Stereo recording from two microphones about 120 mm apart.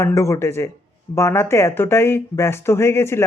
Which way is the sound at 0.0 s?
25° left (ahead or behind).